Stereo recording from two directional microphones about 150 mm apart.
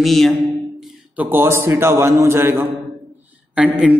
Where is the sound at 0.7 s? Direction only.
10° right (ahead or behind).